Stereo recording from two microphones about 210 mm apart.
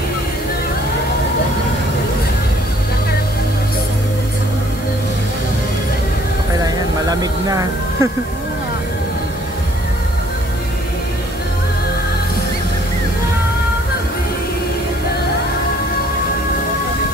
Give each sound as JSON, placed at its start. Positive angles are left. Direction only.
{"t": 6.6, "sound": "music", "side_deg": -15}